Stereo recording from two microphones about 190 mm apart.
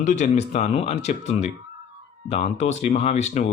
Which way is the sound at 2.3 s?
35° left (ahead or behind).